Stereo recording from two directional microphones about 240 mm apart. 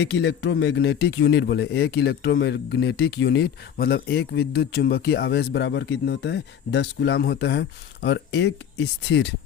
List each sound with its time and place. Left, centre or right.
0.0 s a man's voice: left